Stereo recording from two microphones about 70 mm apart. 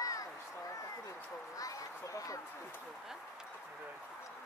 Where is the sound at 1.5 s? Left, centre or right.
Left.